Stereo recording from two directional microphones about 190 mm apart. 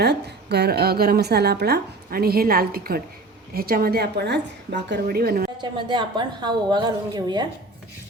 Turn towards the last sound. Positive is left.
turn(degrees=-20)  # may be behind; listen again after turning